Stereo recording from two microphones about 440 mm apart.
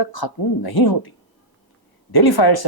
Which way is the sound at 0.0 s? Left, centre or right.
Left.